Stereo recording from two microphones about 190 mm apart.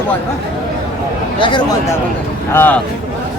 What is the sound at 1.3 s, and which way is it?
Speech, 25° left (ahead or behind).